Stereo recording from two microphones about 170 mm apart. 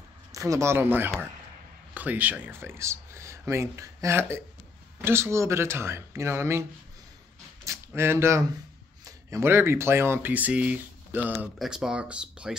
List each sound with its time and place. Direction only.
0.3 s speech: 20° right (ahead or behind)
7.6 s speech: 15° right (ahead or behind)